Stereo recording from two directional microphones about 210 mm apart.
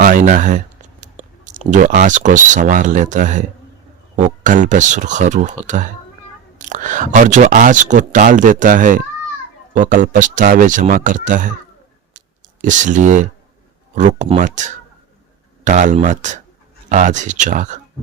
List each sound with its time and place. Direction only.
0.0 s speech: 40° right (ahead or behind)
6.6 s speech: 35° right (ahead or behind)
12.6 s speech: 35° right (ahead or behind)